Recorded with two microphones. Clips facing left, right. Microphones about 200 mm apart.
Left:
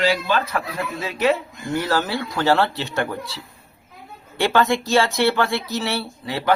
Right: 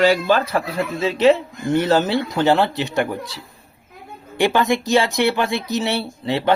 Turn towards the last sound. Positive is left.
turn(degrees=-25)  # may be behind; listen again after turning